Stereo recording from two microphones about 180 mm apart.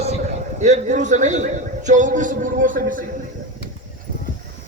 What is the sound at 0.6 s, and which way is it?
A man's voice, 40° right (ahead or behind).